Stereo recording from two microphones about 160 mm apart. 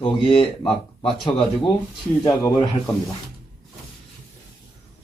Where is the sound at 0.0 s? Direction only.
35° left (ahead or behind).